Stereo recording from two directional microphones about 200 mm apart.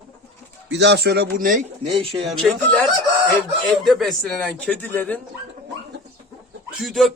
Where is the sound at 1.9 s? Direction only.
25° right (ahead or behind).